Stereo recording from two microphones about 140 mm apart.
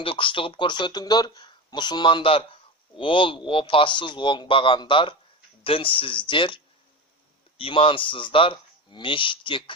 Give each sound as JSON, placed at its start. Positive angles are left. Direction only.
{"t": 0.0, "sound": "speech", "side_deg": 40}
{"t": 7.6, "sound": "speech", "side_deg": 40}